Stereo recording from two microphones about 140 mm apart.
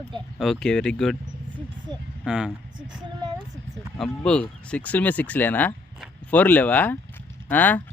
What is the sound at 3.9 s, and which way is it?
Speech, 5° left (ahead or behind).